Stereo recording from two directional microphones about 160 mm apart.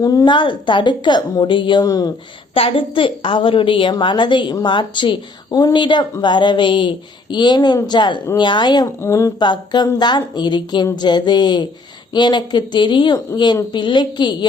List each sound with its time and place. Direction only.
0.0 s a woman's voice: 20° left (ahead or behind)
2.6 s a woman's voice: 35° left (ahead or behind)